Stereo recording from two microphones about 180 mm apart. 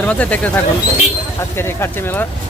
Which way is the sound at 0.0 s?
10° left (ahead or behind).